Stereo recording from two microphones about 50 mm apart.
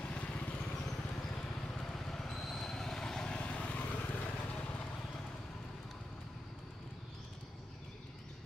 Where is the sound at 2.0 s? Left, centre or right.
Centre; by 4.2 s left.